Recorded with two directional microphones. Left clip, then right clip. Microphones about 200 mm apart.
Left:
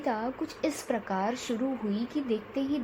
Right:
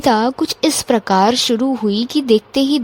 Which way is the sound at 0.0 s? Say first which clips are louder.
Right 17 dB; 60° right (ahead or behind).